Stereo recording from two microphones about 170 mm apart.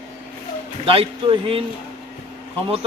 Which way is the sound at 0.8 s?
35° right (ahead or behind).